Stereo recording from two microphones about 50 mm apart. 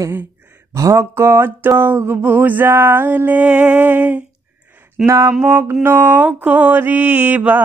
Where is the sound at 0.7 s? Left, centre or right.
Right.